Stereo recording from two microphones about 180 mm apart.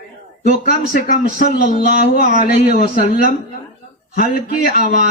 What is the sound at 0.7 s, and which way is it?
A man's voice, 50° left (ahead or behind).